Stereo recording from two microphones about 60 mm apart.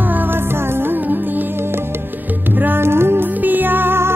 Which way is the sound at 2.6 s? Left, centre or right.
Right.